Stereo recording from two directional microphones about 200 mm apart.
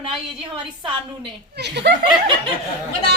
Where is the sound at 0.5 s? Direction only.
25° right (ahead or behind).